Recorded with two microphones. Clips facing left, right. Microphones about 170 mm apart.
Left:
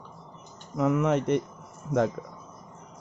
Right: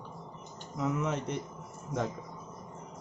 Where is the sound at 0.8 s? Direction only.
60° left (ahead or behind).